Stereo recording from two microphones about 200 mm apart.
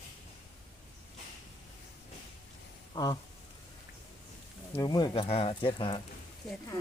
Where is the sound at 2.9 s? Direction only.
20° left (ahead or behind).